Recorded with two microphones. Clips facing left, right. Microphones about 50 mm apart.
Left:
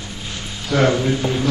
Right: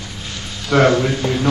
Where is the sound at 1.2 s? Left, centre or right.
Centre.